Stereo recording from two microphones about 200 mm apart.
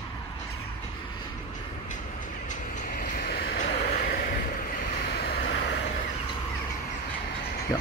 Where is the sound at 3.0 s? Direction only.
55° left (ahead or behind).